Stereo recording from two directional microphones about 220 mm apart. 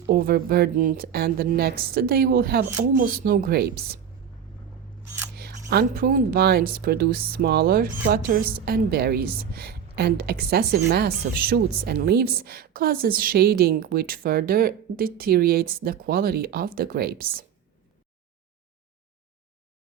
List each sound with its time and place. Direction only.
0.0 s a woman's voice: 45° right (ahead or behind)
5.4 s a woman's voice: 45° right (ahead or behind)